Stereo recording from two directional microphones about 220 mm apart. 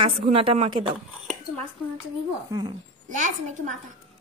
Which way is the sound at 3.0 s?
35° right (ahead or behind).